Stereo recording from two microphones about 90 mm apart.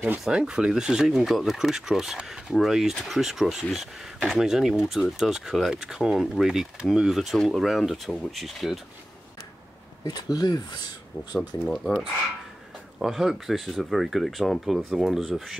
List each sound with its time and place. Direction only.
0.2 s speech: 10° right (ahead or behind)
10.0 s speech: 45° left (ahead or behind)
11.3 s speech: 5° left (ahead or behind)
13.0 s speech: centre (ahead or behind)